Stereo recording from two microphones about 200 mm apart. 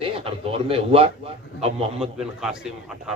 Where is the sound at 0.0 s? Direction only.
30° right (ahead or behind).